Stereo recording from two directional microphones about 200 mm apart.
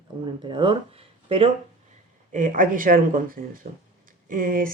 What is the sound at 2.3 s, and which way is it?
Speech, 40° right (ahead or behind).